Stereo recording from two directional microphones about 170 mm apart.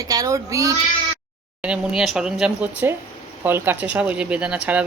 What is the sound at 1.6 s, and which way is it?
Speech, 5° right (ahead or behind).